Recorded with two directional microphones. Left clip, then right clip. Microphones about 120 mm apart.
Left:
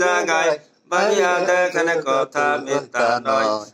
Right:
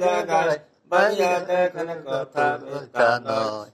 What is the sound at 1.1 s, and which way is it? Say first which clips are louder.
Mantra: left 4 dB; 35° left (ahead or behind).